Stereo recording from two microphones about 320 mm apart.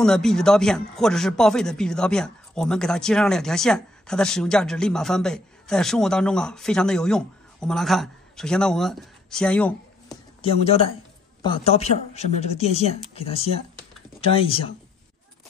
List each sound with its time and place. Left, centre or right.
0.0 s speech: centre
10.4 s speech: centre